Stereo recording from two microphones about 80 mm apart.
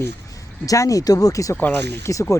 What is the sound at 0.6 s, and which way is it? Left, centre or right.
Speech, left.